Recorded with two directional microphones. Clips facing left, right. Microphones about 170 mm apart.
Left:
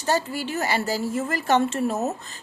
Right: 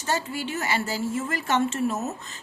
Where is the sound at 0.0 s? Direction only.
35° left (ahead or behind).